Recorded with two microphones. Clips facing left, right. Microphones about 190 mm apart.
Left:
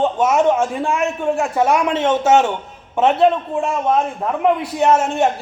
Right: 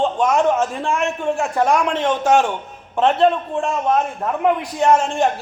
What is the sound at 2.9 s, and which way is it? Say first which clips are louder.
A man's voice: left 1 dB; 5° left (ahead or behind).